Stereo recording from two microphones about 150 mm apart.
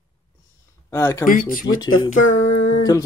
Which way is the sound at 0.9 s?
20° left (ahead or behind).